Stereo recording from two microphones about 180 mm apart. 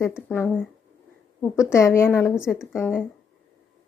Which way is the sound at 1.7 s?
15° left (ahead or behind).